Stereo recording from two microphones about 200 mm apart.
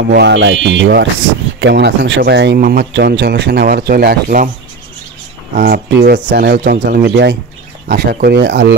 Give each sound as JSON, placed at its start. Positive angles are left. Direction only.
{"t": 0.1, "sound": "speech", "side_deg": -60}
{"t": 5.6, "sound": "speech", "side_deg": -50}